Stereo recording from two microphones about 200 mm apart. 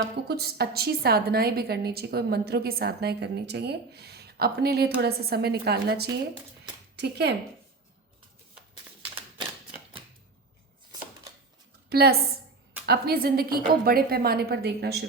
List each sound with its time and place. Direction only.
0.3 s a woman's voice: 50° right (ahead or behind)
11.9 s a woman's voice: 55° right (ahead or behind)